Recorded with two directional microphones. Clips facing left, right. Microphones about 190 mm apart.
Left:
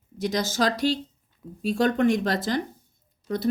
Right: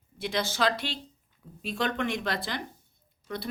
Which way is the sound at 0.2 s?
40° left (ahead or behind).